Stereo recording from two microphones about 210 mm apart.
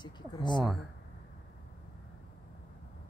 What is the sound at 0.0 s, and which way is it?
Speech, 20° left (ahead or behind).